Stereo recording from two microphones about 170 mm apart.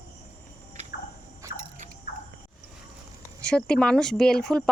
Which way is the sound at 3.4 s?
5° left (ahead or behind).